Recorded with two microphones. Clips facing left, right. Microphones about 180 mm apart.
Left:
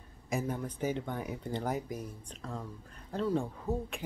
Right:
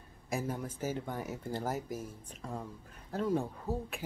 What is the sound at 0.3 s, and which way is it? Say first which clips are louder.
Speech: left 2 dB; 5° right (ahead or behind).